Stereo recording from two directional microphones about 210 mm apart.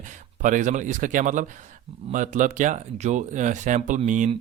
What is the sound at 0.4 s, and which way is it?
Speech, 35° right (ahead or behind).